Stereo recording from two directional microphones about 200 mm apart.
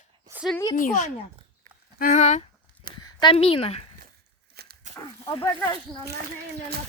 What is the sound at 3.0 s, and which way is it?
Speech, 25° left (ahead or behind).